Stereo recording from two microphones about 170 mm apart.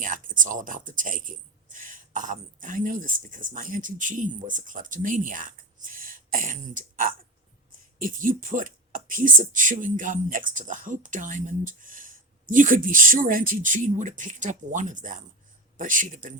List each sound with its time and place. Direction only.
0.0 s speech: 50° right (ahead or behind)